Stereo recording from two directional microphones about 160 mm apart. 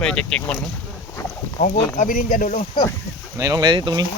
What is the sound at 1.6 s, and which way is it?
Speech, 50° left (ahead or behind).